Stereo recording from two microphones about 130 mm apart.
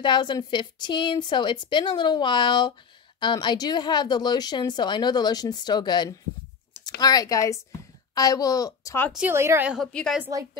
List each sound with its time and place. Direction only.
0.0 s a woman's voice: 35° left (ahead or behind)
9.3 s a woman's voice: 20° right (ahead or behind)